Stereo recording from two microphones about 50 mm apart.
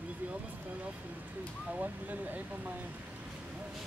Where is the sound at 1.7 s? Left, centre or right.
Right.